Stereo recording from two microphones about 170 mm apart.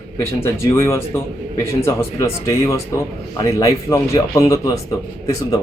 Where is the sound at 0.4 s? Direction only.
15° left (ahead or behind).